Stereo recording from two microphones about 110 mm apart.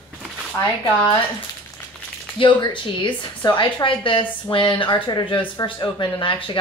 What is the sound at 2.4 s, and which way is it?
A woman's voice, 45° left (ahead or behind).